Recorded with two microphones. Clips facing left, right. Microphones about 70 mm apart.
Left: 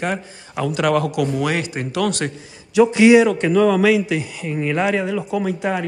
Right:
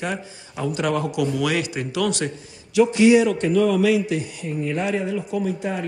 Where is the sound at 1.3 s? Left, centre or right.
Left.